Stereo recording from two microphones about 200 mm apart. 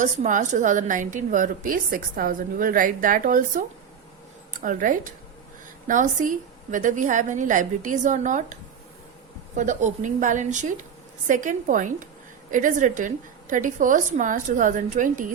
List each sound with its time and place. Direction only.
0.0 s a woman's voice: 40° right (ahead or behind)
9.6 s a woman's voice: 40° right (ahead or behind)